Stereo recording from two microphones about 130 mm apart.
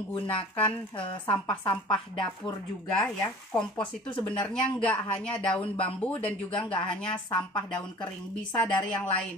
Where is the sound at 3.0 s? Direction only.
5° left (ahead or behind).